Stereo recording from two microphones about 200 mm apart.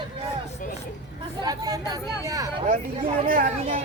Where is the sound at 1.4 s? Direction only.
20° right (ahead or behind).